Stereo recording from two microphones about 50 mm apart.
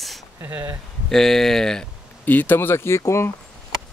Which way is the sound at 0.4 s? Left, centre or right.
Right.